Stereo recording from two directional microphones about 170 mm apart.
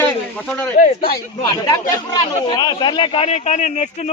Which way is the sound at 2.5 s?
25° left (ahead or behind).